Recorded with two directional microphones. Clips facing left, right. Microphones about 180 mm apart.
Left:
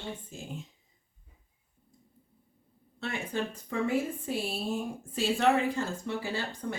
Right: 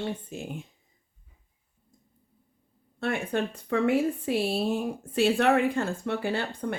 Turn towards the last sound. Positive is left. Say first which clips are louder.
# right 5 dB
turn(degrees=-60)  # may be behind; listen again after turning